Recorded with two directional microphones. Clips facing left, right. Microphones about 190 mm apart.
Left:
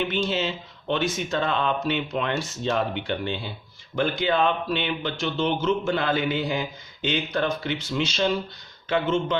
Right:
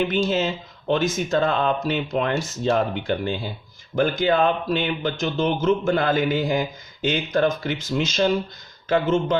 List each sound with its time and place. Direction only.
0.3 s speech: 45° right (ahead or behind)